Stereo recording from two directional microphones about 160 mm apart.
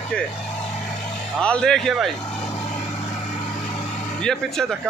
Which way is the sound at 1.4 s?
5° left (ahead or behind).